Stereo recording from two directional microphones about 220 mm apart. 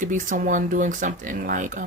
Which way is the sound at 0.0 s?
35° right (ahead or behind).